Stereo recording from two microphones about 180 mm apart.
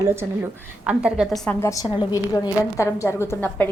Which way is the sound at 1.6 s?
20° left (ahead or behind).